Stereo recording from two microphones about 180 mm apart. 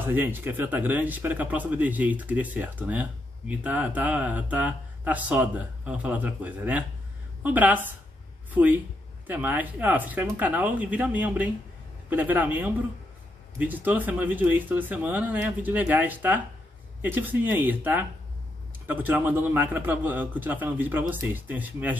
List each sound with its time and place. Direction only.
0.0 s speech: 10° right (ahead or behind)